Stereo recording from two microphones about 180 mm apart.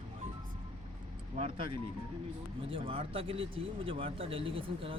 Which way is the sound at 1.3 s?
30° right (ahead or behind).